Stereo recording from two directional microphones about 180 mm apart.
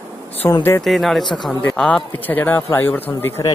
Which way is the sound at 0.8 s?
Centre (ahead or behind).